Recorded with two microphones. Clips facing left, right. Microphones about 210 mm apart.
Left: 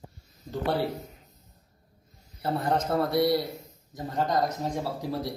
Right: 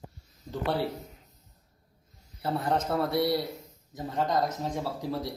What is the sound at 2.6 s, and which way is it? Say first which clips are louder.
A man's voice: left 2 dB; 5° right (ahead or behind).